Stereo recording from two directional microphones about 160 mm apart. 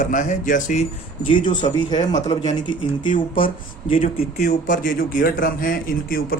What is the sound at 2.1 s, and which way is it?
Speech, 40° left (ahead or behind).